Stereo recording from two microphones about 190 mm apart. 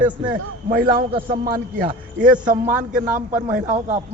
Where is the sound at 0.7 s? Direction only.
45° right (ahead or behind).